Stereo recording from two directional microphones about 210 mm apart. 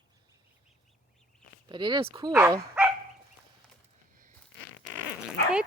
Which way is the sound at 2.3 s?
10° right (ahead or behind).